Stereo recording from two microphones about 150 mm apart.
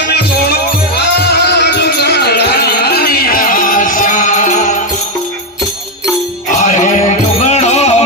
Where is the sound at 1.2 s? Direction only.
90° left; by 4.8 s 55° left (ahead or behind).